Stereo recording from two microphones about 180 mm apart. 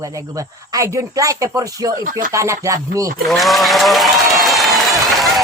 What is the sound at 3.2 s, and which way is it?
Applause, centre (ahead or behind).